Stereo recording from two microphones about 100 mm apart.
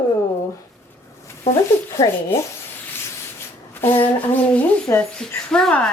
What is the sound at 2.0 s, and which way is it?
Speech, 50° left (ahead or behind).